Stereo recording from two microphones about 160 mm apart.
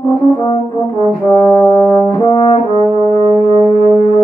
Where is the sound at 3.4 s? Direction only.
40° right (ahead or behind).